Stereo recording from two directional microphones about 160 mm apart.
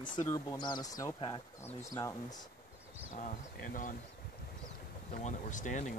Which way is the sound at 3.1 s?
60° left (ahead or behind).